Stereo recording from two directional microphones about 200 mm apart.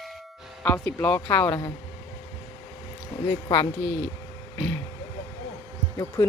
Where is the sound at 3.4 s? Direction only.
20° left (ahead or behind).